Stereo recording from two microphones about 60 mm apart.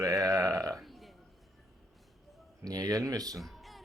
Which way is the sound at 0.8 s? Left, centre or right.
Centre.